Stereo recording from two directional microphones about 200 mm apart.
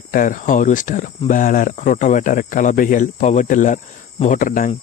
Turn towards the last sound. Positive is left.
turn(degrees=40)  # may be behind; listen again after turning